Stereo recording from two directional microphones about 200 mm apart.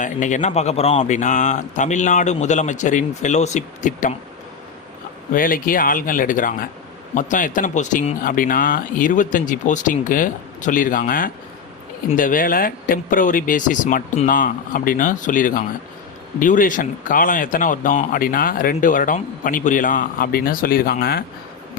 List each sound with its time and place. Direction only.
0.0 s speech: 40° left (ahead or behind)
5.3 s speech: 45° left (ahead or behind)